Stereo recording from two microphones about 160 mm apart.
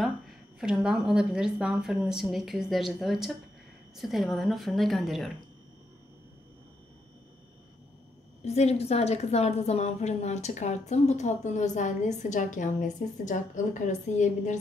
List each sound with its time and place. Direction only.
0.6 s a woman's voice: 5° right (ahead or behind)
8.5 s a woman's voice: 40° left (ahead or behind)